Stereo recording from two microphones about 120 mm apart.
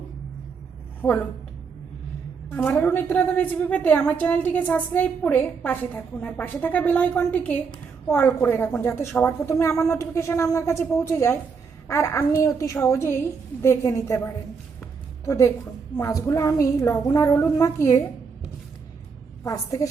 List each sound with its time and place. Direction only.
2.6 s a woman's voice: 15° left (ahead or behind)
19.5 s a woman's voice: 30° left (ahead or behind)